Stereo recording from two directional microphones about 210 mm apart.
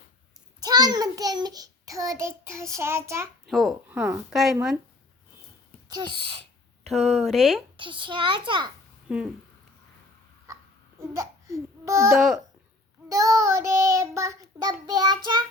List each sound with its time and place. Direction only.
0.6 s a child's voice: 20° right (ahead or behind)
3.4 s speech: centre (ahead or behind)
5.9 s a child's voice: 20° right (ahead or behind)
6.8 s speech: centre (ahead or behind)
7.8 s a child's voice: 25° right (ahead or behind)
9.0 s speech: 5° right (ahead or behind)
10.5 s babbling: 15° right (ahead or behind)
12.1 s speech: centre (ahead or behind)
13.1 s child singing: 15° right (ahead or behind)